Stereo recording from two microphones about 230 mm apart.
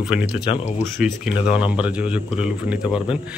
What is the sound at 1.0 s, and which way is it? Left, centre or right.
Speech, centre.